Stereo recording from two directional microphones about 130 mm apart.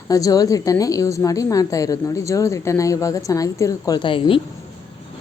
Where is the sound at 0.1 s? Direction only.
25° left (ahead or behind).